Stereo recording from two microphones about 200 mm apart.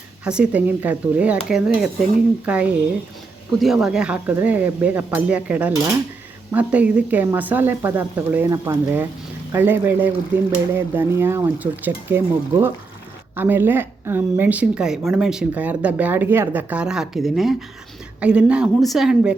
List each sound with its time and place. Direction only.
0.3 s speech: 5° right (ahead or behind)